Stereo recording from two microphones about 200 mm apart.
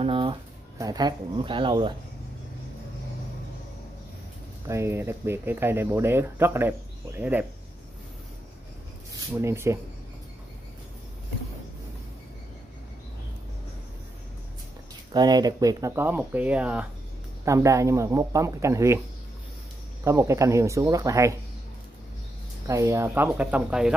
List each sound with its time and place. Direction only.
0.0 s speech: 25° right (ahead or behind)
4.6 s speech: 15° right (ahead or behind)
9.4 s speech: 15° right (ahead or behind)
15.1 s speech: 20° right (ahead or behind)
20.1 s speech: 15° right (ahead or behind)
22.7 s speech: 15° right (ahead or behind)